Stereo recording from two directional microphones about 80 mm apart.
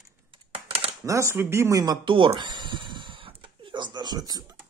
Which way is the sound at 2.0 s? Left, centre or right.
Right.